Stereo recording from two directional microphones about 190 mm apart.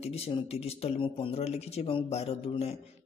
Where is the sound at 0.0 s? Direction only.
35° left (ahead or behind).